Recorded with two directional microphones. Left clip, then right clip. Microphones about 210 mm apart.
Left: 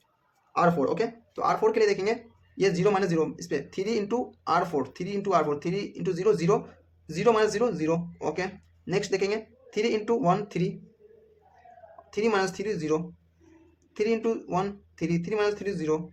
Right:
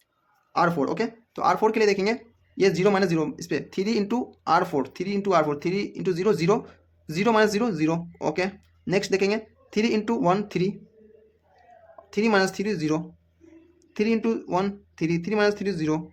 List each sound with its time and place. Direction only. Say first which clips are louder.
0.5 s speech: right 1 dB; 40° right (ahead or behind)
12.1 s speech: right 3 dB; 35° right (ahead or behind)